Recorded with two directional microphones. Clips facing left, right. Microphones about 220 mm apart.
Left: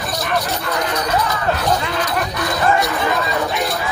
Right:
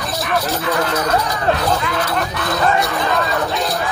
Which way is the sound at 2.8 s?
Centre (ahead or behind).